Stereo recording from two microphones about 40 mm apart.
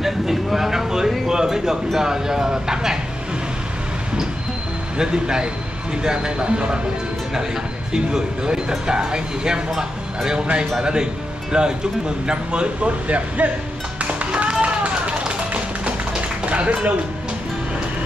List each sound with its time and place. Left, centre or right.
0.0 s a sound: centre
2.0 s speech: centre
4.9 s speech: right
7.9 s speech: centre
14.0 s music: right
14.6 s tap: right